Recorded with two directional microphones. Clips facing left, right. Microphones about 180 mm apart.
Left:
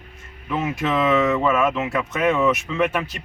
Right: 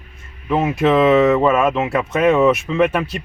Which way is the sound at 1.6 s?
35° right (ahead or behind).